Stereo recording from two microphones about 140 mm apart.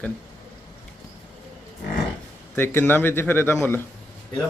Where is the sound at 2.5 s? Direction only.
15° left (ahead or behind).